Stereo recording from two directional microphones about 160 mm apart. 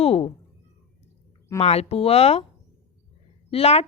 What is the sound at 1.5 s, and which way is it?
Speech, 40° left (ahead or behind).